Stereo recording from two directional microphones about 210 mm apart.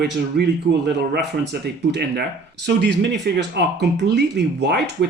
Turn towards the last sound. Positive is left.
turn(degrees=-50)  # may be behind; listen again after turning